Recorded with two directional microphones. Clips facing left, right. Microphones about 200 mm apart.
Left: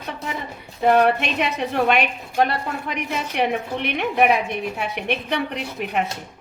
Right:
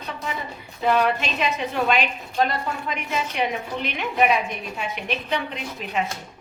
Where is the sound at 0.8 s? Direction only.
55° left (ahead or behind).